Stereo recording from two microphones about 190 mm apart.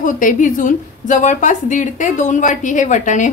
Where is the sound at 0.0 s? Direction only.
45° left (ahead or behind).